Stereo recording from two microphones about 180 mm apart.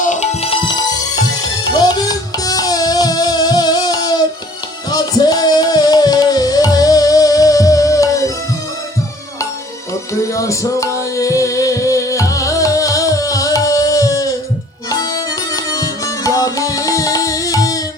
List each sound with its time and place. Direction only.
0.0 s music: 40° left (ahead or behind); by 8.2 s 20° left (ahead or behind)
10.3 s music: 15° left (ahead or behind)